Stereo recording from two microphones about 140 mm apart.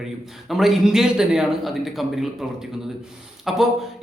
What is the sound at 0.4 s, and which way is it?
A man's voice, centre (ahead or behind).